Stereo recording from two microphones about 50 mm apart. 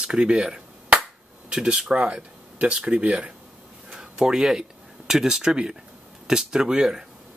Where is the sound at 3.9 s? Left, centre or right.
Centre.